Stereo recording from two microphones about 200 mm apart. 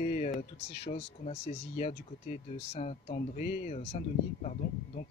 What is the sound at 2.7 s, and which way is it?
Speech, 30° left (ahead or behind).